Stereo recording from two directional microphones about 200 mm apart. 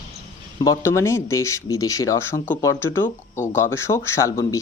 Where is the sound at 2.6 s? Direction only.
15° left (ahead or behind).